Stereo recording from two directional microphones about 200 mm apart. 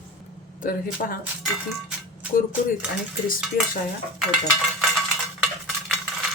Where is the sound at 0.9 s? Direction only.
45° left (ahead or behind).